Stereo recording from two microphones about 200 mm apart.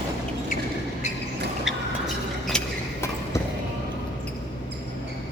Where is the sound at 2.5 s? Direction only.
10° left (ahead or behind).